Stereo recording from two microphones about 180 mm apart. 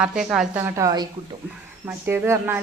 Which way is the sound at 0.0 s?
5° right (ahead or behind).